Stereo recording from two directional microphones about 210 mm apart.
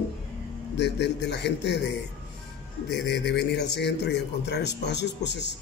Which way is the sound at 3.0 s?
55° left (ahead or behind).